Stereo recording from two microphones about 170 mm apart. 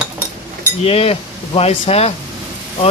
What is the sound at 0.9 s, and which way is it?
Speech, 35° left (ahead or behind).